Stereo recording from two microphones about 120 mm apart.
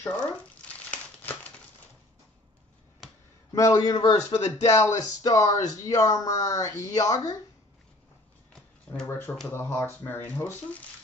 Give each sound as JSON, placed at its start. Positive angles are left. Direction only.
{"t": 0.1, "sound": "crumpling", "side_deg": 10}
{"t": 3.5, "sound": "speech", "side_deg": 30}
{"t": 8.9, "sound": "a sound", "side_deg": 10}
{"t": 9.5, "sound": "speech", "side_deg": 20}